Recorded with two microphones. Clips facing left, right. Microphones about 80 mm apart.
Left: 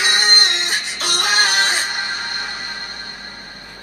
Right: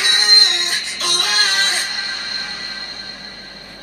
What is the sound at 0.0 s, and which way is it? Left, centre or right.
Music, left.